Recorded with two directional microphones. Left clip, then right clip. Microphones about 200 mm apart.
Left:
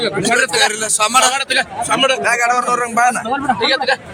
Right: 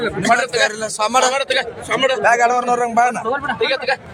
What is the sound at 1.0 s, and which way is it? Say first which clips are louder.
A man's voice: left 2 dB; 40° right (ahead or behind).